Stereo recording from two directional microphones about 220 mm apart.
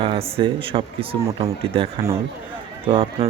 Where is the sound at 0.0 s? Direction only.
25° right (ahead or behind).